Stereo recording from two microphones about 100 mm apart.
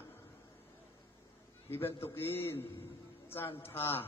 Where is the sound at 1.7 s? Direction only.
25° left (ahead or behind).